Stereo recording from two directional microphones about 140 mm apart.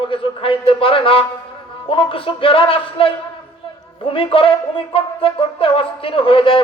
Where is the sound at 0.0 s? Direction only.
40° left (ahead or behind).